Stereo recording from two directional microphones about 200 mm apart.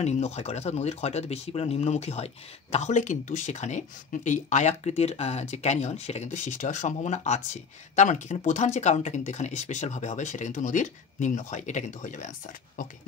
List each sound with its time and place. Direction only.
0.0 s speech: 35° left (ahead or behind)